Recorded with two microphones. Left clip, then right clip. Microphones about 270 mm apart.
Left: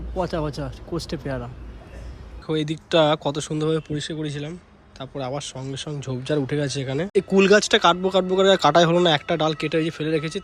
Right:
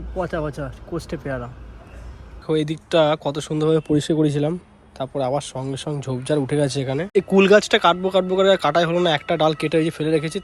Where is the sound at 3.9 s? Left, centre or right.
Centre.